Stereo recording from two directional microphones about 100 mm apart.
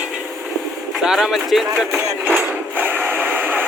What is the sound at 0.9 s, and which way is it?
Speech, 5° right (ahead or behind).